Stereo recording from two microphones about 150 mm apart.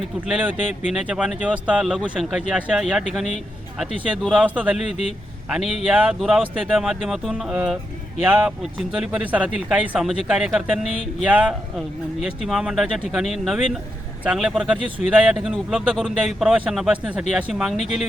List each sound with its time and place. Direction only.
0.3 s speech: 10° right (ahead or behind)
4.8 s speech: 50° left (ahead or behind)
5.5 s speech: 5° right (ahead or behind)